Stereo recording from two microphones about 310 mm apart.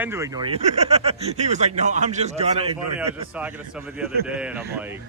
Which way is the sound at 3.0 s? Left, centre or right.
Centre.